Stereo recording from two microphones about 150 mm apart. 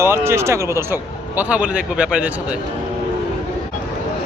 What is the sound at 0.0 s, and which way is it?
Speech, 15° right (ahead or behind).